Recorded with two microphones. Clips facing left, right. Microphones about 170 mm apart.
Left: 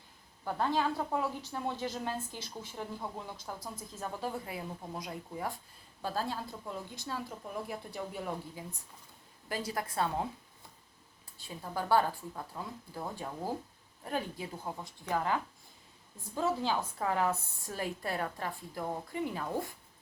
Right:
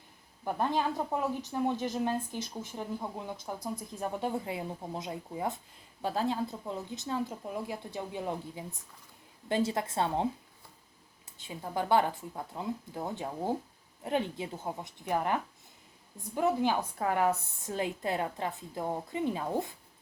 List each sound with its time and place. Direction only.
0.4 s a woman's voice: 15° right (ahead or behind)
11.3 s a woman's voice: 20° right (ahead or behind)